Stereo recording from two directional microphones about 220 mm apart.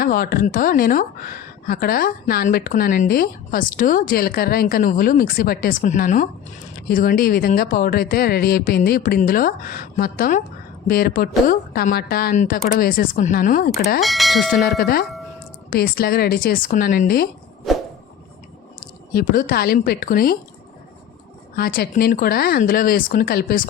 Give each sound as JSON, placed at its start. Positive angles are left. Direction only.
{"t": 0.0, "sound": "a woman's voice", "side_deg": 40}
{"t": 14.0, "sound": "speech", "side_deg": 0}
{"t": 14.6, "sound": "a woman's voice", "side_deg": 45}
{"t": 18.8, "sound": "speech", "side_deg": 40}
{"t": 21.5, "sound": "speech", "side_deg": 45}